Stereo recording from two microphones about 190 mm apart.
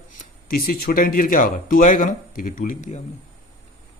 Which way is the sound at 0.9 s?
45° left (ahead or behind).